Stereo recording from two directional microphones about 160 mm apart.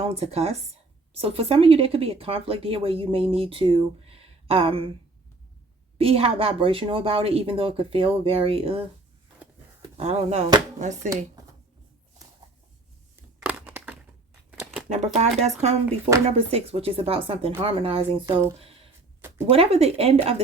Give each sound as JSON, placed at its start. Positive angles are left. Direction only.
{"t": 0.0, "sound": "a woman's voice", "side_deg": -40}
{"t": 6.0, "sound": "a woman's voice", "side_deg": -35}
{"t": 10.0, "sound": "a woman's voice", "side_deg": -40}
{"t": 13.4, "sound": "crushing", "side_deg": -10}
{"t": 14.8, "sound": "a woman's voice", "side_deg": -45}
{"t": 19.5, "sound": "a woman's voice", "side_deg": -40}